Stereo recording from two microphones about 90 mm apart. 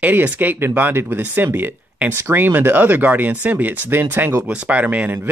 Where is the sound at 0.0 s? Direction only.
20° right (ahead or behind).